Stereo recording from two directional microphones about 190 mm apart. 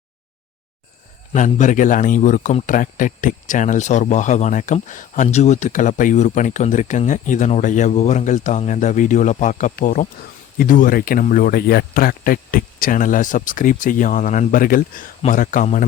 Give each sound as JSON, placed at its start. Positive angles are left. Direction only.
{"t": 1.3, "sound": "a man's voice", "side_deg": 40}